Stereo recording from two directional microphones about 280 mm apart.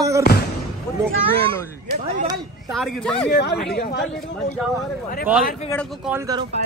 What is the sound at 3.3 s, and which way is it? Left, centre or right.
Speech, left.